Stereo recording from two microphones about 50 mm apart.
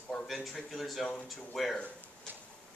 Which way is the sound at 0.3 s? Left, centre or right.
Centre.